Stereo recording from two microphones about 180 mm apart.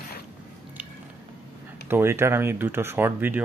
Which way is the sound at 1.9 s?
15° right (ahead or behind).